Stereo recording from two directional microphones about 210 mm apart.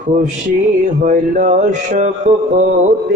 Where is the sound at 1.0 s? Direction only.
35° right (ahead or behind).